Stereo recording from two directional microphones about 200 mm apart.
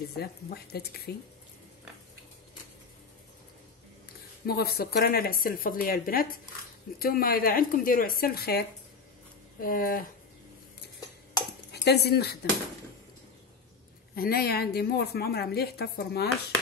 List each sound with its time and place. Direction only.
0.2 s a woman's voice: 50° left (ahead or behind)
4.5 s a woman's voice: 50° left (ahead or behind)
11.7 s speech: 55° left (ahead or behind)
14.1 s a woman's voice: 50° left (ahead or behind)